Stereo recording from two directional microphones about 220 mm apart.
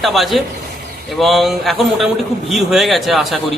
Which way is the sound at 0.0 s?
Centre (ahead or behind).